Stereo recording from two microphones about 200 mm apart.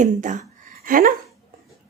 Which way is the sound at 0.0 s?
40° right (ahead or behind).